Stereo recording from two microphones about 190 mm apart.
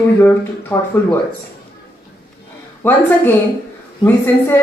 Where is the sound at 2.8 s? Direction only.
10° left (ahead or behind).